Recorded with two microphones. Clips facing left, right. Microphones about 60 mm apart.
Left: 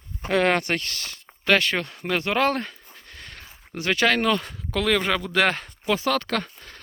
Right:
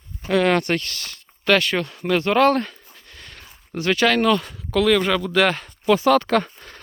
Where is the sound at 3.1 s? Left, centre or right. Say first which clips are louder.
Even; left.